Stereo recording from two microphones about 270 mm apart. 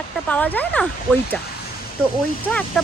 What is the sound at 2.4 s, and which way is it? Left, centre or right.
Speech, centre.